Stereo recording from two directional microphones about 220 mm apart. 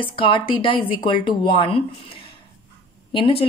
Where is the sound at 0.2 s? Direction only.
25° left (ahead or behind).